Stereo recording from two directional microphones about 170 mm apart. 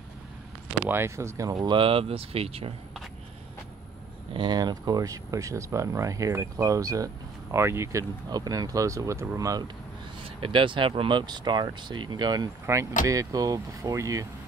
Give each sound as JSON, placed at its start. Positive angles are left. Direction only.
{"t": 0.7, "sound": "speech", "side_deg": -10}
{"t": 4.3, "sound": "speech", "side_deg": -25}
{"t": 10.4, "sound": "speech", "side_deg": -30}